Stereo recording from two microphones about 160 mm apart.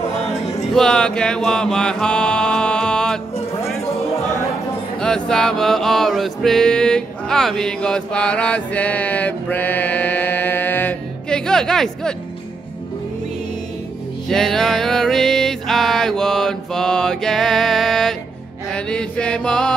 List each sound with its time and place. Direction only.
0.3 s music: 45° left (ahead or behind)
0.7 s mantra: 5° left (ahead or behind)
5.0 s male singing: 5° left (ahead or behind)
14.3 s music: centre (ahead or behind)
18.7 s chant: 5° left (ahead or behind)